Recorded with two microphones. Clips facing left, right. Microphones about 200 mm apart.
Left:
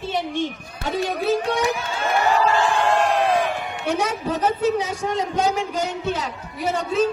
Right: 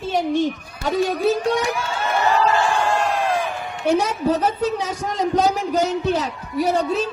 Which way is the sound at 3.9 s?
35° right (ahead or behind).